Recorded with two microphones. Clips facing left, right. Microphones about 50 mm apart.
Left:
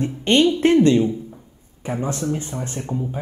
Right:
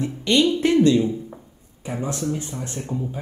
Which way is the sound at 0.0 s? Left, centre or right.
Left.